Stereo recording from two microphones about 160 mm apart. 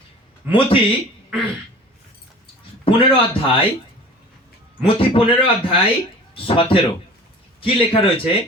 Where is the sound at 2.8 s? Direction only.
35° left (ahead or behind).